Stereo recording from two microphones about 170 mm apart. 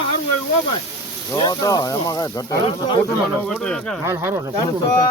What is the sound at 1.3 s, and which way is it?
Speech, 20° left (ahead or behind).